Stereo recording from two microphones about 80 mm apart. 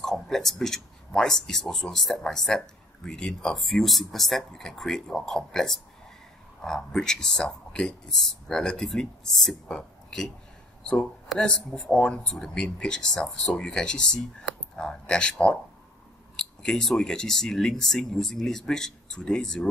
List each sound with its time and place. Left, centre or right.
0.0 s speech: centre